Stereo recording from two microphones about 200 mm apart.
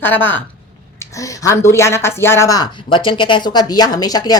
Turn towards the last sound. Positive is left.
turn(degrees=20)  # may be behind; listen again after turning